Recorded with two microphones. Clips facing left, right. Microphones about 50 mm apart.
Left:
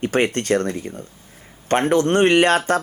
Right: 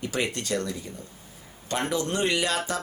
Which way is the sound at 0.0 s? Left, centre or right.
Left.